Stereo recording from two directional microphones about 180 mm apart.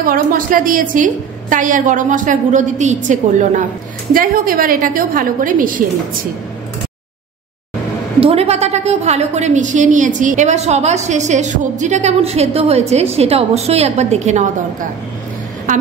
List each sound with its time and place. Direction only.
0.0 s a woman's voice: 50° right (ahead or behind)
8.2 s a woman's voice: 35° right (ahead or behind)